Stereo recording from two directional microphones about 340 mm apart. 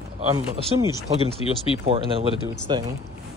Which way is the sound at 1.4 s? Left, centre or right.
Centre.